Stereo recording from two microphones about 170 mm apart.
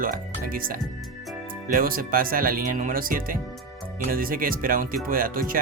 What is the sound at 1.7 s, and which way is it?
Speech, 55° right (ahead or behind).